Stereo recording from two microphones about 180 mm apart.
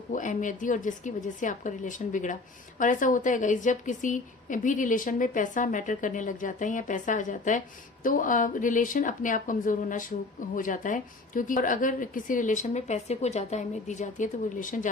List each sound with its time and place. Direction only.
0.1 s a woman's voice: 45° left (ahead or behind)